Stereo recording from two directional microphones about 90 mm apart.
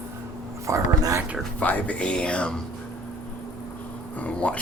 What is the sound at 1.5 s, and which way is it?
Speech, 15° left (ahead or behind).